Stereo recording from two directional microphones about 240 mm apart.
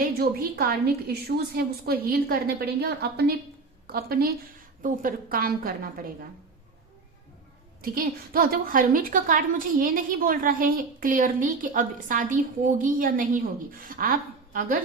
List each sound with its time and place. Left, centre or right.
0.2 s a woman's voice: right
7.8 s a woman's voice: right